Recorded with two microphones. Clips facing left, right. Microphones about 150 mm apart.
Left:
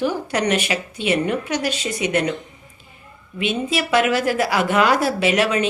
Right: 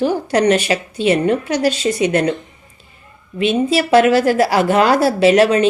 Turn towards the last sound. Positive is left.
turn(degrees=-35)  # may be behind; listen again after turning